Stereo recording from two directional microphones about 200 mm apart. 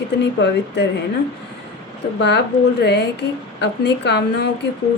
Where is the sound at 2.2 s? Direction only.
60° left (ahead or behind).